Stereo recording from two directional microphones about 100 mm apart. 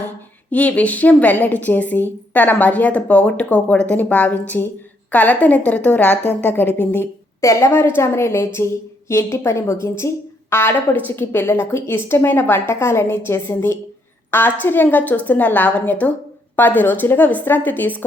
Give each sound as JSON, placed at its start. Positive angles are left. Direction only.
{"t": 0.5, "sound": "a woman's voice", "side_deg": 15}